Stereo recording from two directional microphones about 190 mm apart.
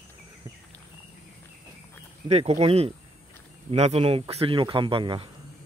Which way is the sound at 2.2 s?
35° right (ahead or behind).